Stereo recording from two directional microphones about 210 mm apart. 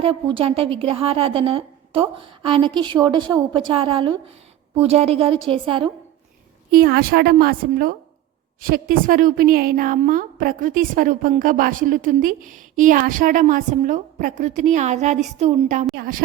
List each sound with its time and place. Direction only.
0.0 s a woman's voice: 25° right (ahead or behind)
6.7 s a woman's voice: 45° right (ahead or behind)
8.6 s a woman's voice: 40° right (ahead or behind)